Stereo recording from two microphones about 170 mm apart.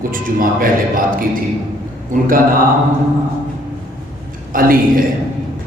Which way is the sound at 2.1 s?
50° right (ahead or behind).